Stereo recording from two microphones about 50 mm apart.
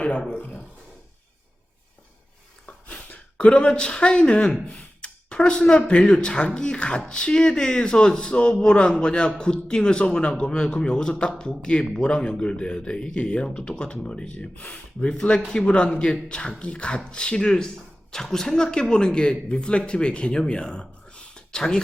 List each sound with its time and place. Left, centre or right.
0.3 s speech: left
2.6 s a sound: left
3.3 s speech: left